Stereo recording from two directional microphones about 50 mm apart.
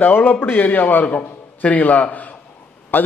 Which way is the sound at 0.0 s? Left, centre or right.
Left.